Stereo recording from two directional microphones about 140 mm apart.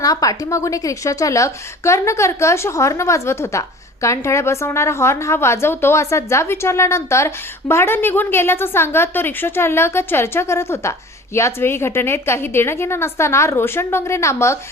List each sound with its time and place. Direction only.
0.0 s a woman's voice: 25° left (ahead or behind)